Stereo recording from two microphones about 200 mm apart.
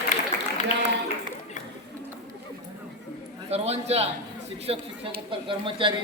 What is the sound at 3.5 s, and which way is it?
A man's voice, 30° right (ahead or behind).